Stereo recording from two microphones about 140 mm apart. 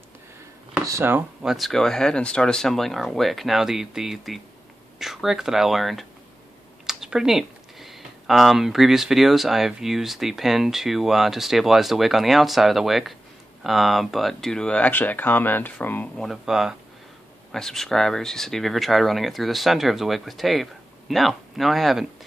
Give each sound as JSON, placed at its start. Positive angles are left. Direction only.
{"t": 0.8, "sound": "speech", "side_deg": -20}
{"t": 1.4, "sound": "speech", "side_deg": 0}
{"t": 16.2, "sound": "speech", "side_deg": 0}